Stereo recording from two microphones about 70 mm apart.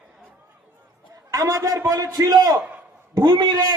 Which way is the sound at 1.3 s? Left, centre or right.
Right.